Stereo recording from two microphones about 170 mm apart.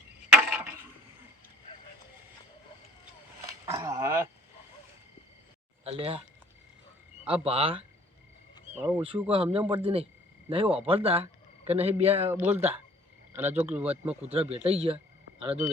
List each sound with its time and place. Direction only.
0.3 s a sound: 5° right (ahead or behind)
3.7 s a sound: 20° right (ahead or behind)
5.8 s speech: 35° right (ahead or behind)
7.3 s speech: 35° right (ahead or behind)
8.7 s speech: 10° right (ahead or behind)
9.3 s speech: 35° right (ahead or behind)
12.3 s speech: 10° right (ahead or behind)
14.2 s speech: 35° right (ahead or behind)